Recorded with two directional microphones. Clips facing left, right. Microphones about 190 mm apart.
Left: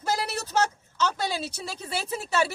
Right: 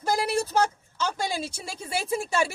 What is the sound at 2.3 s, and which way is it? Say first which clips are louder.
Speech: left 3 dB; 10° right (ahead or behind).